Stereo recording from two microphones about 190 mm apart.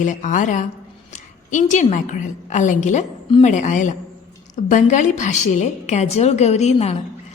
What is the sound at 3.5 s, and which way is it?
A woman's voice, 40° left (ahead or behind).